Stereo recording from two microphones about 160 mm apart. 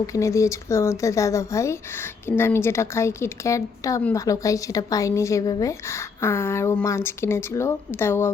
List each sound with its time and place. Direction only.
0.1 s speech: 20° left (ahead or behind)